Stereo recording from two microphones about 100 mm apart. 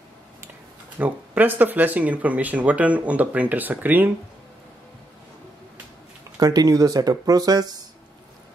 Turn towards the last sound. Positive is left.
turn(degrees=-40)  # may be behind; listen again after turning